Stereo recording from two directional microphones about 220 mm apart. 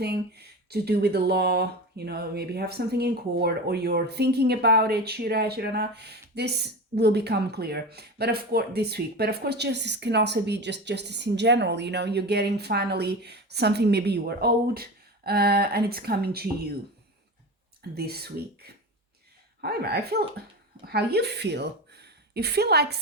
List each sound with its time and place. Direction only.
0.0 s speech: 45° right (ahead or behind)
17.9 s a woman's voice: 45° right (ahead or behind)